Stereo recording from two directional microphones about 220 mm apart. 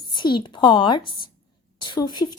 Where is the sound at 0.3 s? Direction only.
20° left (ahead or behind).